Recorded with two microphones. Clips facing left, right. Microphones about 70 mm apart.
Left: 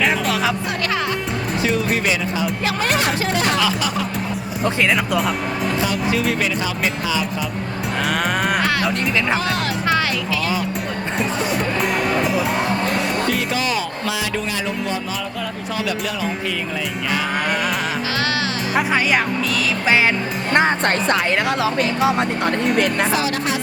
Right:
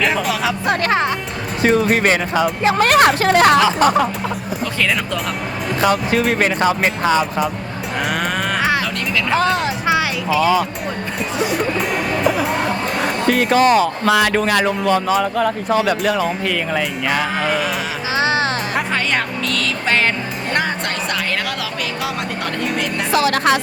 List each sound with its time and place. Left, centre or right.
0.0 s music: centre
0.7 s music: right
1.6 s speech: right
5.8 s speech: right
8.1 s sheep: centre
8.8 s speech: left
9.4 s speech: right
9.6 s speech: centre
11.2 s speech: centre
13.0 s speech: right
18.2 s music: right
18.7 s speech: centre
20.5 s speech: left
23.1 s speech: right